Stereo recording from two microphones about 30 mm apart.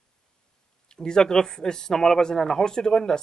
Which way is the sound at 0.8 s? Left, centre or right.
Left.